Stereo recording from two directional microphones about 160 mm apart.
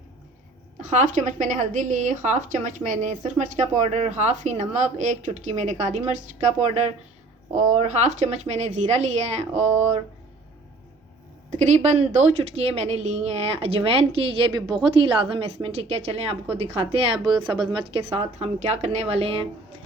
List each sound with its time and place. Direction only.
0.9 s speech: 50° right (ahead or behind)
9.6 s a sound: 15° right (ahead or behind)
11.5 s a woman's voice: 45° right (ahead or behind)